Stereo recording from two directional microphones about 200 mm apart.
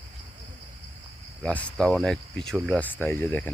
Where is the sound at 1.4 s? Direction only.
5° left (ahead or behind).